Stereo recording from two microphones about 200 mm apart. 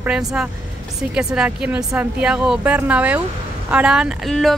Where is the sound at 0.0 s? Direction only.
5° right (ahead or behind).